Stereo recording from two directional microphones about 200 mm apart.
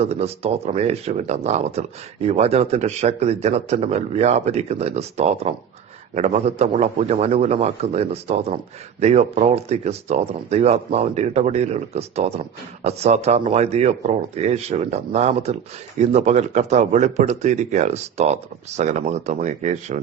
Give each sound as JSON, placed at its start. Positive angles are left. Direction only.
{"t": 0.0, "sound": "speech", "side_deg": -30}